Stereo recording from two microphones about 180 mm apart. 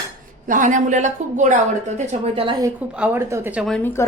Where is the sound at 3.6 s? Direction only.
5° left (ahead or behind).